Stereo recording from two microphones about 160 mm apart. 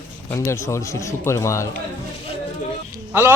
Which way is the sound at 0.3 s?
20° left (ahead or behind).